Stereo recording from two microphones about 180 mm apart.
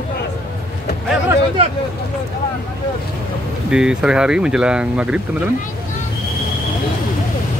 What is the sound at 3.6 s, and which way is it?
Speech, 5° right (ahead or behind).